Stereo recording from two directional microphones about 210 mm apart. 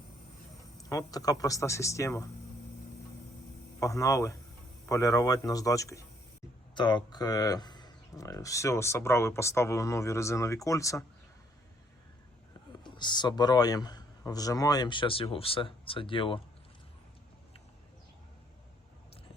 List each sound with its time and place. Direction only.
0.8 s speech: 15° left (ahead or behind)
3.8 s speech: 15° left (ahead or behind)
12.8 s speech: 20° left (ahead or behind)